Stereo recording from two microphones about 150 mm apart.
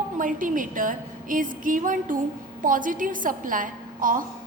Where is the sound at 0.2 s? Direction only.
65° right (ahead or behind).